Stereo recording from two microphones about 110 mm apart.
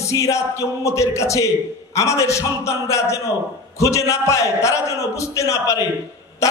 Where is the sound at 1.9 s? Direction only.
30° left (ahead or behind).